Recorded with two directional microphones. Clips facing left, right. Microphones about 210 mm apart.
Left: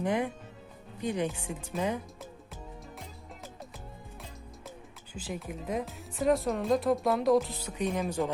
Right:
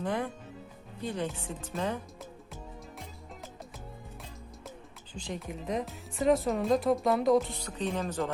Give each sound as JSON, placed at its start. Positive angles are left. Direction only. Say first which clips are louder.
{"t": 0.0, "sound": "speech", "louder": "left 3 dB", "side_deg": 15}
{"t": 5.1, "sound": "speech", "louder": "even", "side_deg": 5}
{"t": 7.8, "sound": "speech", "louder": "left 2 dB", "side_deg": 10}